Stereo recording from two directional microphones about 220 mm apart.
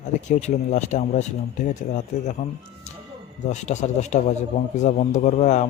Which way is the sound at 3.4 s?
30° left (ahead or behind).